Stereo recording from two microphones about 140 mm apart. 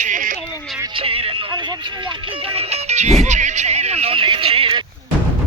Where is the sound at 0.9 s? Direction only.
40° right (ahead or behind).